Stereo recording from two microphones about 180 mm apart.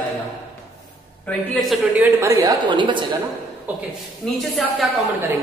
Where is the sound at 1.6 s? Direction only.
Centre (ahead or behind).